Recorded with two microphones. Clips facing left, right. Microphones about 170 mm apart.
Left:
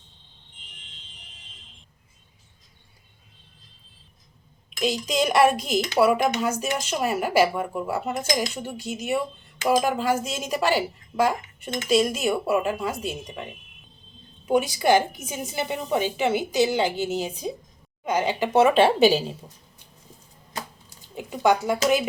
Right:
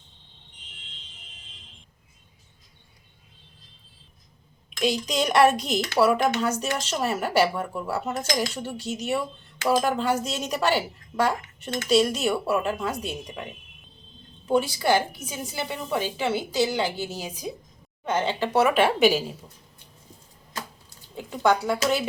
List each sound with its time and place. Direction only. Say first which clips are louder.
4.8 s a woman's voice: left 1 dB; 5° left (ahead or behind)
14.4 s a woman's voice: left 2 dB; 15° left (ahead or behind)
18.0 s a woman's voice: left 1 dB; 10° left (ahead or behind); by 19.4 s 30° left (ahead or behind)
21.2 s speech: left 1 dB; 15° left (ahead or behind)